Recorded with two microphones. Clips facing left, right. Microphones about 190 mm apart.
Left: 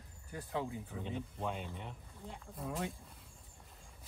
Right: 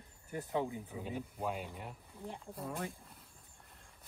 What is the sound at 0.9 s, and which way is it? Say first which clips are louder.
Speech: even; 5° right (ahead or behind).